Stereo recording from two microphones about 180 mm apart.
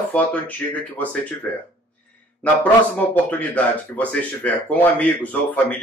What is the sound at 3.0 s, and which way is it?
Speech, 10° left (ahead or behind).